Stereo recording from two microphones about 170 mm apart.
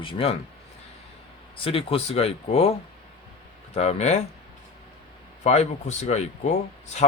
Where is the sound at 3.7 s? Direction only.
40° left (ahead or behind).